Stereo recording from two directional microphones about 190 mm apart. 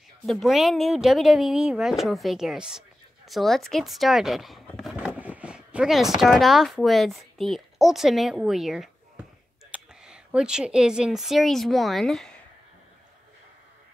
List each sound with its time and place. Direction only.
0.3 s speech: centre (ahead or behind)